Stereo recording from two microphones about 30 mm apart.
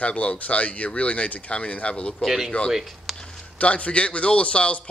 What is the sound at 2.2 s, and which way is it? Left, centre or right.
Speech, centre.